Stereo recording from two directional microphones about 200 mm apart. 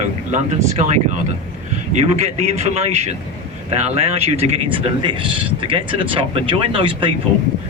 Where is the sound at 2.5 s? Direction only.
30° right (ahead or behind).